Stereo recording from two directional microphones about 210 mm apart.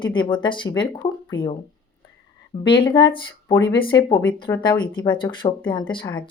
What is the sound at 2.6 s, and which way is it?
Speech, 25° left (ahead or behind).